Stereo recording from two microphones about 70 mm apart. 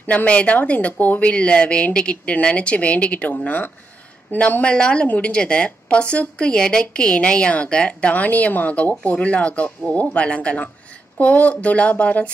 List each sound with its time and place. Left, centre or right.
0.0 s a woman's voice: left